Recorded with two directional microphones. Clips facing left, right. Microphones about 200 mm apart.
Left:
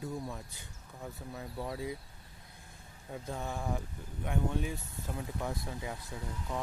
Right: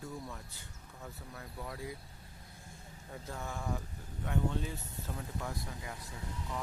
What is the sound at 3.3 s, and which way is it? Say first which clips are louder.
Speech: left 3 dB; 20° left (ahead or behind).